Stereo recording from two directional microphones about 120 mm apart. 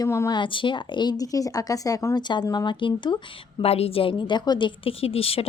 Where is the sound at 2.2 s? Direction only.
35° left (ahead or behind).